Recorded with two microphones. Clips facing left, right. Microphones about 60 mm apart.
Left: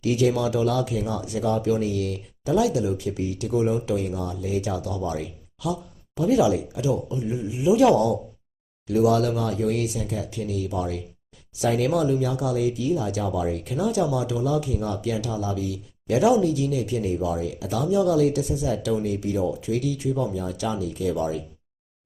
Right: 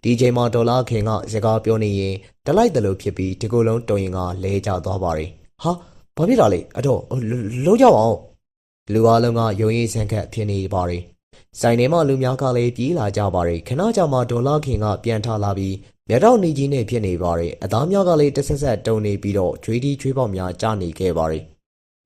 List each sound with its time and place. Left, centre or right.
0.0 s speech: right